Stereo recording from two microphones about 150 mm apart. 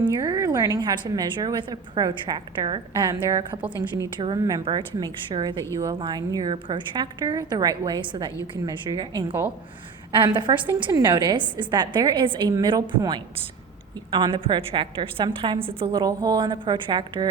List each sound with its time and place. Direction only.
0.0 s a woman's voice: 25° right (ahead or behind)